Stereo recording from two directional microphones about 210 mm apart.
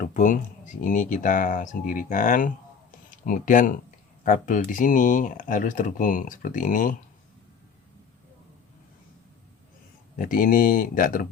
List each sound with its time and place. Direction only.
0.0 s speech: 40° left (ahead or behind)
10.2 s speech: 40° left (ahead or behind)